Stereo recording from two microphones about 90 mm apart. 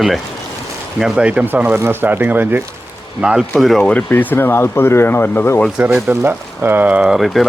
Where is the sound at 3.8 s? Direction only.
15° left (ahead or behind).